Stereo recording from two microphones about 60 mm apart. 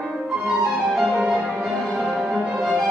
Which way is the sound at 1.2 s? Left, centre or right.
Centre.